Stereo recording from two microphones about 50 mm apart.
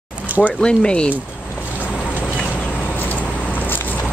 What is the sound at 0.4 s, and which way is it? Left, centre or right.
Speech, centre.